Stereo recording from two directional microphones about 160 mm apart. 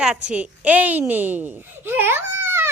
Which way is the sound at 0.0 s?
5° right (ahead or behind).